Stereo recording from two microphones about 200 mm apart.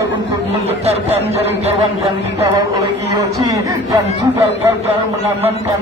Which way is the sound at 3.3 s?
15° right (ahead or behind).